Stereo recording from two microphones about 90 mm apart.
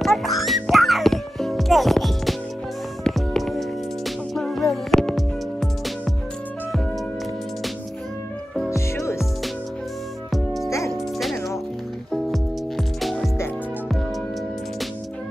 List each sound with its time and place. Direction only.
0.0 s music: centre (ahead or behind)
8.6 s music: 30° left (ahead or behind)
10.3 s music: centre (ahead or behind)